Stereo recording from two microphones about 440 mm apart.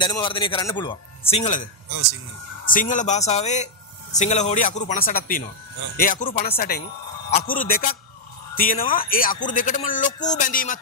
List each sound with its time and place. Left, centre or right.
0.0 s speech: centre